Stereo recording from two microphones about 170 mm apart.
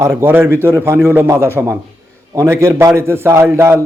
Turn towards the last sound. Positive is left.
turn(degrees=-15)  # may be behind; listen again after turning